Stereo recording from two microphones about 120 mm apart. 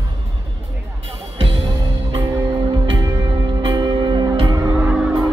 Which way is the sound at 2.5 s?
35° right (ahead or behind).